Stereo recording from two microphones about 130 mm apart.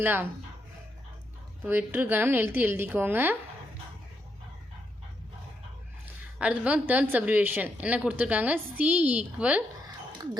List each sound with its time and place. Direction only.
0.0 s a woman's voice: 15° right (ahead or behind)
1.6 s a woman's voice: 15° right (ahead or behind)
6.4 s a woman's voice: 10° right (ahead or behind)